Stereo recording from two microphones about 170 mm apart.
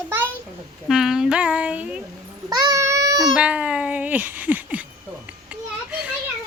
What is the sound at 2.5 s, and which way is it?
Speech, 20° right (ahead or behind).